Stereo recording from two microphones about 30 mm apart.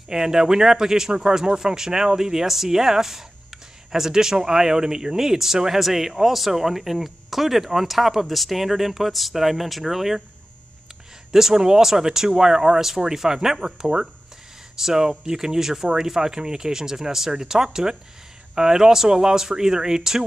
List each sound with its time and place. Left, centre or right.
0.1 s speech: right
11.3 s speech: centre